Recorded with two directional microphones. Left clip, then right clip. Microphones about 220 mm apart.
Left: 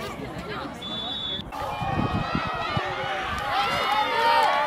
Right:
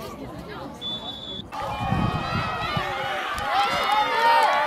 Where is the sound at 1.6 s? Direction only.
55° right (ahead or behind).